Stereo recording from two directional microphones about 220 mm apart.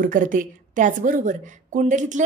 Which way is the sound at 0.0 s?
35° right (ahead or behind).